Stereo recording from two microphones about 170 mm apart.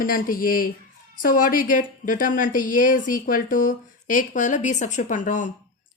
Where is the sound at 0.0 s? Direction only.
55° left (ahead or behind).